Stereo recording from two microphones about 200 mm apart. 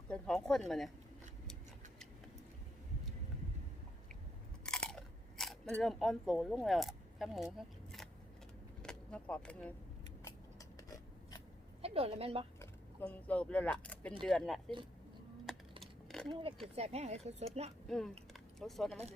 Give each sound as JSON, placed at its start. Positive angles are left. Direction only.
{"t": 0.1, "sound": "speech", "side_deg": 5}
{"t": 4.6, "sound": "biting", "side_deg": 5}
{"t": 5.8, "sound": "speech", "side_deg": 0}
{"t": 10.8, "sound": "scissors", "side_deg": 20}
{"t": 11.8, "sound": "a woman's voice", "side_deg": -30}
{"t": 12.5, "sound": "speech", "side_deg": 10}
{"t": 15.5, "sound": "typing", "side_deg": 0}
{"t": 15.8, "sound": "a sound", "side_deg": 0}
{"t": 16.7, "sound": "speech", "side_deg": -30}
{"t": 17.8, "sound": "speech", "side_deg": 0}